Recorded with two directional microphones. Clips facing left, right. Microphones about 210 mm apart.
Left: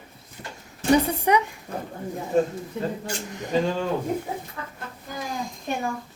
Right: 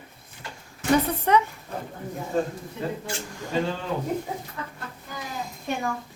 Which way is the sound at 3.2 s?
20° left (ahead or behind).